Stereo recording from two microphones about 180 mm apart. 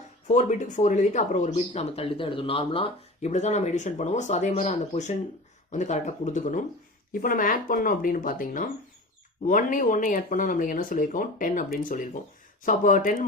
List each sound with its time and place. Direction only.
0.3 s speech: 40° left (ahead or behind)